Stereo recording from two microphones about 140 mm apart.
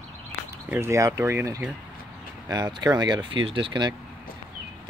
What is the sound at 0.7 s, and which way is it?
Speech, 20° right (ahead or behind).